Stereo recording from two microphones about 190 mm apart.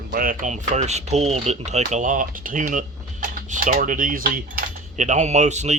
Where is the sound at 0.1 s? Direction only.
45° right (ahead or behind).